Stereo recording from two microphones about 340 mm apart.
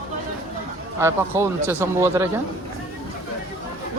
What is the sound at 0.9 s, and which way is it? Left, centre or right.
Speech, centre.